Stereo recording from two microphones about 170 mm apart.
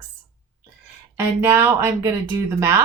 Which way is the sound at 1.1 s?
15° right (ahead or behind).